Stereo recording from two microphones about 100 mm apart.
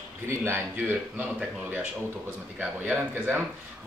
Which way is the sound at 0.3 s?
25° right (ahead or behind).